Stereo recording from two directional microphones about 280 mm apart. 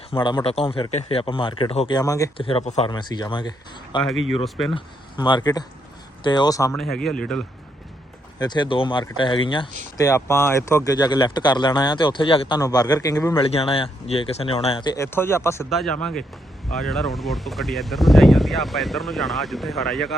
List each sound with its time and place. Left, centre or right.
0.1 s speech: centre
4.4 s speech: centre
4.7 s speech: centre
8.4 s speech: centre